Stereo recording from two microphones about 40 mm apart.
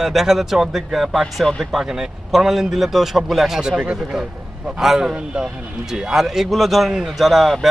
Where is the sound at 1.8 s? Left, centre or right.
Centre.